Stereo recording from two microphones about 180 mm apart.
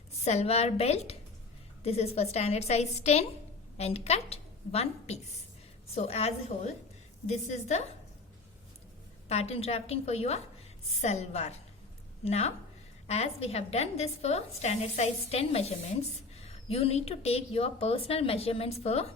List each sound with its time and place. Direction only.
0.3 s a woman's voice: 35° left (ahead or behind)
9.3 s a woman's voice: 35° left (ahead or behind)